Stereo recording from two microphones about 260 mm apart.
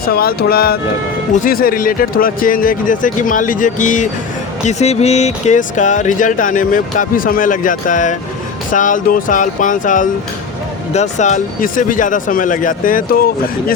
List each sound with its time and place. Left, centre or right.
0.0 s speech: left